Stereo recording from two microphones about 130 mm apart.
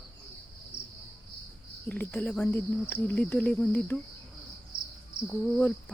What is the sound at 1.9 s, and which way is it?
Speech, 15° left (ahead or behind).